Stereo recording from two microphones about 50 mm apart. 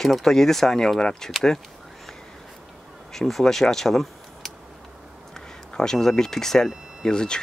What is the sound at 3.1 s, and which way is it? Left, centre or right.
Speech, centre.